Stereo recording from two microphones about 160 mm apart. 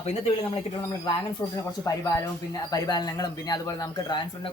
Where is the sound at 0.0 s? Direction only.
40° left (ahead or behind).